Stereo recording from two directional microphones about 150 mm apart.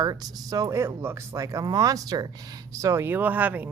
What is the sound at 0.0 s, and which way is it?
Speech, 25° right (ahead or behind).